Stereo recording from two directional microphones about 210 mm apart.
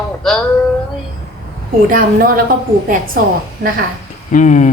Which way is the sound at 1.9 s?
40° right (ahead or behind).